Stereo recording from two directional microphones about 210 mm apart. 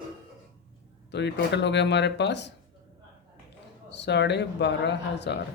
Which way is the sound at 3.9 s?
55° left (ahead or behind).